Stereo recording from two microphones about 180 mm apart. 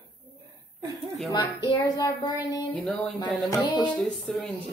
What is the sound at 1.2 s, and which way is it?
Speech, 25° left (ahead or behind).